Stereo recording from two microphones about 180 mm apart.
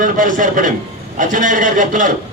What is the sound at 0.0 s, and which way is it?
A man's voice, 45° right (ahead or behind).